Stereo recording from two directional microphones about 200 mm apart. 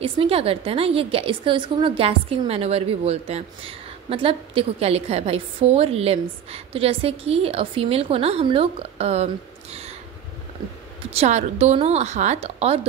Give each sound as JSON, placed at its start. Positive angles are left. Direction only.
{"t": 0.0, "sound": "a woman's voice", "side_deg": -30}
{"t": 11.1, "sound": "a woman's voice", "side_deg": -35}